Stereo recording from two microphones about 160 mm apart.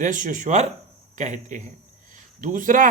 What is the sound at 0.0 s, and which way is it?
A man's voice, 55° right (ahead or behind).